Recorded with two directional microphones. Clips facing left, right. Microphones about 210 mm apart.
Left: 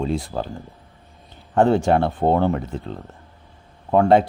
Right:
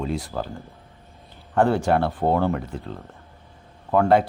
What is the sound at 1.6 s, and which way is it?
Speech, 20° left (ahead or behind).